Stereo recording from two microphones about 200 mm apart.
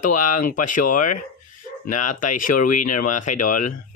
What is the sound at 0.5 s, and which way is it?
Speech, 40° left (ahead or behind).